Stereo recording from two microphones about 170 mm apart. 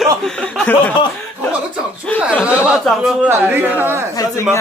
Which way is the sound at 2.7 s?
5° right (ahead or behind).